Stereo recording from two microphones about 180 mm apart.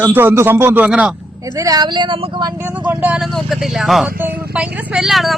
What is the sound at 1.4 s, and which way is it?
Speech, 20° right (ahead or behind).